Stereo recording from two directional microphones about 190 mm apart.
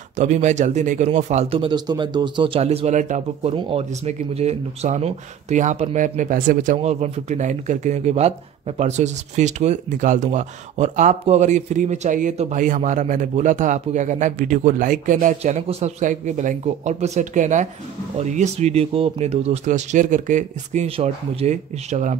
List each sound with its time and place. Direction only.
0.1 s speech: 40° right (ahead or behind)